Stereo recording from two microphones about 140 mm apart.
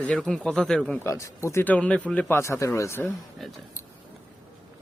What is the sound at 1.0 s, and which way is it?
Speech, 20° left (ahead or behind).